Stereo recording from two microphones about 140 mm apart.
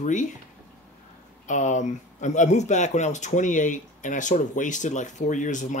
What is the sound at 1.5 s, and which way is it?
Speech, 60° left (ahead or behind).